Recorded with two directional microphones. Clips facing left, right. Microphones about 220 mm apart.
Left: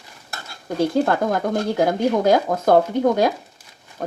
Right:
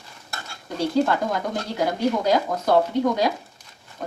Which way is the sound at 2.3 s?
50° left (ahead or behind).